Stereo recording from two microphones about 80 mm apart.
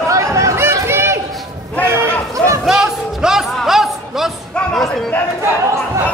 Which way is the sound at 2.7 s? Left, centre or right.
Centre.